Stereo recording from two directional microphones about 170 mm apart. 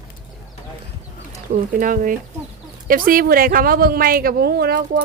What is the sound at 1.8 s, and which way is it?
Speech, 50° right (ahead or behind).